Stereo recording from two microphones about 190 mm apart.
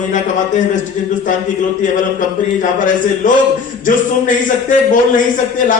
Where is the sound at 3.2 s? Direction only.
40° left (ahead or behind).